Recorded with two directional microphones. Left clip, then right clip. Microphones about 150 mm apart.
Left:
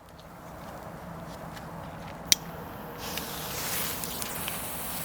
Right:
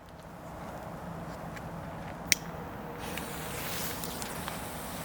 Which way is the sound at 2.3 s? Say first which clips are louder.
Left 4 dB; 15° left (ahead or behind).